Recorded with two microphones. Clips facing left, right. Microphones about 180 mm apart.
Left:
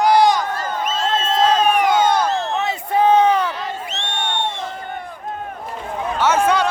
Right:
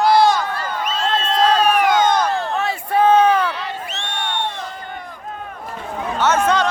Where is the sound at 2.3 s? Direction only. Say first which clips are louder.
Even; 20° left (ahead or behind).